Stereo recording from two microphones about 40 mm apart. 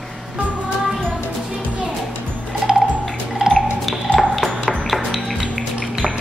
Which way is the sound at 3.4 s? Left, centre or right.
Centre.